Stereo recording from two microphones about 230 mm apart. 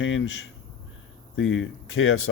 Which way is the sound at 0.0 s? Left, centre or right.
Left.